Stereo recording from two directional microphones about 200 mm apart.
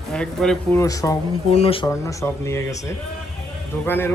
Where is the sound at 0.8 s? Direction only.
15° left (ahead or behind).